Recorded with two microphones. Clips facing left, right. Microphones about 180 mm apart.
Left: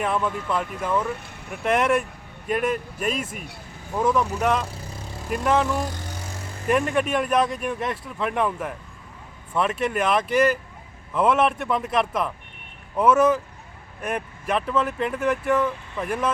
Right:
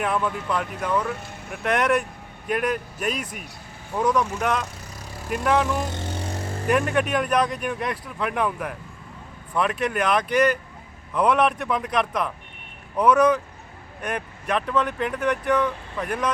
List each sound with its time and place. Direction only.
0.0 s speech: centre (ahead or behind)
5.9 s vehicle: 25° right (ahead or behind)
6.7 s speech: centre (ahead or behind)